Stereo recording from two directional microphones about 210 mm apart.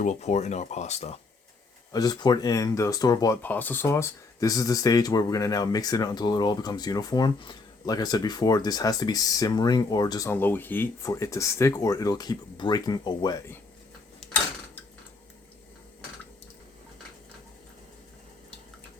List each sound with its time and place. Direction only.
0.0 s speech: 35° left (ahead or behind)
1.9 s speech: 20° left (ahead or behind)